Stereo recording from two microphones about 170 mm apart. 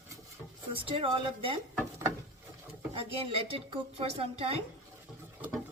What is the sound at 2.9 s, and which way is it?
A woman's voice, 35° right (ahead or behind).